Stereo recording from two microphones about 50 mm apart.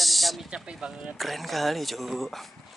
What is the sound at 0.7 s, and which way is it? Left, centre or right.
Speech, centre.